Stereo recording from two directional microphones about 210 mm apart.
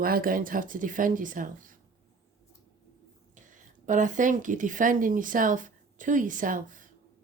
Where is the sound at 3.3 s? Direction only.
40° right (ahead or behind).